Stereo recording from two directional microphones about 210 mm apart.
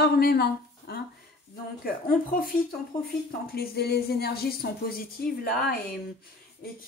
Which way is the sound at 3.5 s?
50° left (ahead or behind).